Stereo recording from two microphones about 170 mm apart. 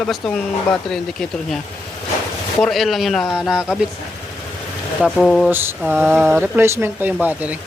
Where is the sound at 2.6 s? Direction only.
Centre (ahead or behind).